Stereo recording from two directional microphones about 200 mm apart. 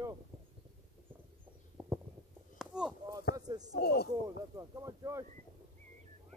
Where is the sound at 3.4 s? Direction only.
20° right (ahead or behind).